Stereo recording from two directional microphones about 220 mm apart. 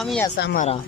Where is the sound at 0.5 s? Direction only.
30° left (ahead or behind).